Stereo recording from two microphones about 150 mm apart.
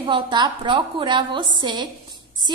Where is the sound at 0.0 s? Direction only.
30° right (ahead or behind).